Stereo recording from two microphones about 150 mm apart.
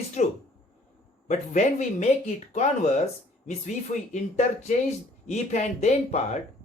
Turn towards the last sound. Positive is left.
turn(degrees=50)  # may be behind; listen again after turning